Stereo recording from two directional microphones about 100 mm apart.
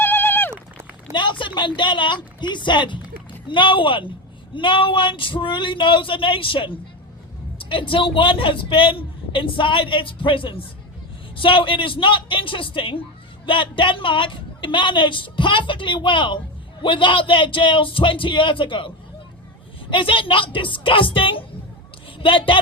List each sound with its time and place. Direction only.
0.0 s a sound: 20° left (ahead or behind)
0.5 s run: 25° right (ahead or behind)
1.1 s a woman's voice: 55° left (ahead or behind)